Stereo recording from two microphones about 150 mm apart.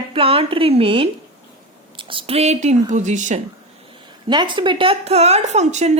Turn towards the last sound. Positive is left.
turn(degrees=-50)  # may be behind; listen again after turning